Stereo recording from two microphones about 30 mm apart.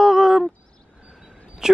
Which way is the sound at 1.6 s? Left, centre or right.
Right.